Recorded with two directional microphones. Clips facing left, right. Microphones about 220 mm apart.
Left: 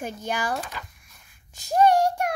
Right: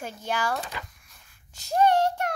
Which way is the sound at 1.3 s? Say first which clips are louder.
Left 2 dB; 15° left (ahead or behind).